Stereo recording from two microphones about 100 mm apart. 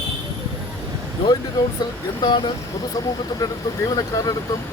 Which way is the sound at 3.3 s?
35° left (ahead or behind).